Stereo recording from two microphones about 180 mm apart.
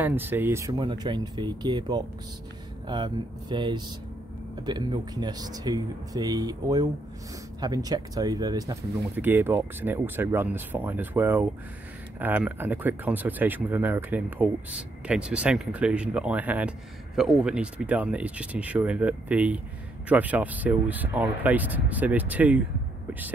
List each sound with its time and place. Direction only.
0.0 s speech: 10° right (ahead or behind)
0.7 s speech: 25° right (ahead or behind); by 22.6 s 10° right (ahead or behind)